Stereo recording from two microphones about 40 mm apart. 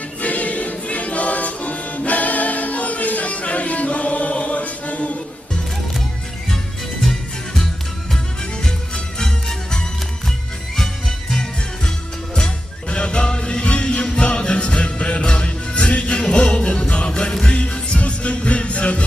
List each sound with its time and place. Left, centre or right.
0.2 s music: left
9.1 s music: centre
12.9 s music: left